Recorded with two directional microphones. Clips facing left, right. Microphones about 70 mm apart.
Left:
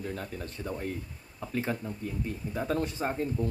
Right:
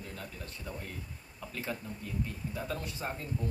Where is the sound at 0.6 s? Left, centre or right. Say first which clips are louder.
Left 8 dB; left.